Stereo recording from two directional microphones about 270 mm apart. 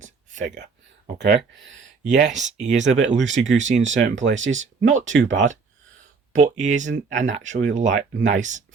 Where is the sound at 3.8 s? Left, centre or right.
Right.